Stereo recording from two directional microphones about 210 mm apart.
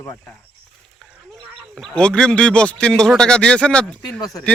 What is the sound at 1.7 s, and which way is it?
Speech, 5° left (ahead or behind).